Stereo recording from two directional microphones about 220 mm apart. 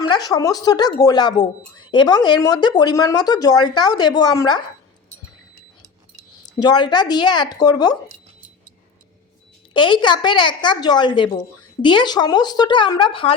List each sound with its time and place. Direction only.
0.1 s speech: 15° left (ahead or behind)
6.6 s a woman's voice: 20° left (ahead or behind)
9.7 s a woman's voice: 20° left (ahead or behind)